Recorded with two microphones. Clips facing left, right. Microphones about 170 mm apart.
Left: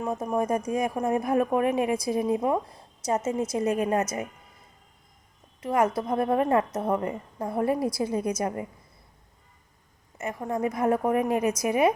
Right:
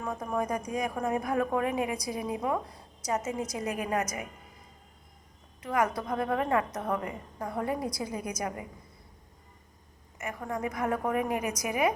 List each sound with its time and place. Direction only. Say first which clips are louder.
0.0 s a woman's voice: left 5 dB; 20° left (ahead or behind)
3.2 s a woman's voice: left 6 dB; 15° right (ahead or behind)
3.8 s a woman's voice: left 3 dB; 25° left (ahead or behind)
5.6 s a woman's voice: left 4 dB; 30° left (ahead or behind)
10.2 s a woman's voice: left 5 dB; 25° left (ahead or behind)